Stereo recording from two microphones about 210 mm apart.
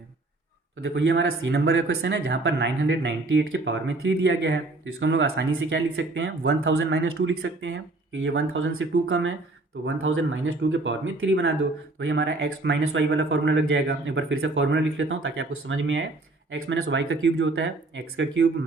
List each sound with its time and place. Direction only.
0.8 s speech: 55° right (ahead or behind)
1.9 s speech: 55° right (ahead or behind)
16.5 s speech: 75° right (ahead or behind)
16.8 s speech: 65° right (ahead or behind)